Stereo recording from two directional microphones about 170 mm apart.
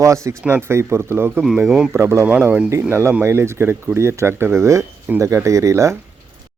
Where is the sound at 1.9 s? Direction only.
15° right (ahead or behind).